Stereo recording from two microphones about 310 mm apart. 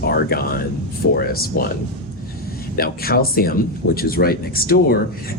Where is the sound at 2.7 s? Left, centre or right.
Left.